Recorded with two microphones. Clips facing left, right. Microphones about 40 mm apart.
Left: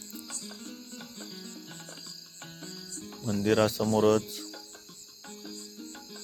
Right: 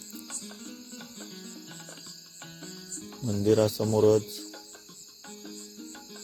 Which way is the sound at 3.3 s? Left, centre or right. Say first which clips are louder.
Right 2 dB; left.